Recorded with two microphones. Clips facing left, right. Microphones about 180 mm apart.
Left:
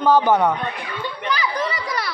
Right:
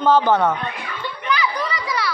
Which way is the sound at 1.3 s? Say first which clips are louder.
Right 1 dB; 40° left (ahead or behind).